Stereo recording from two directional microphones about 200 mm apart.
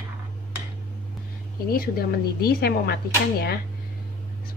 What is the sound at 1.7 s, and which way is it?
Speech, 50° left (ahead or behind).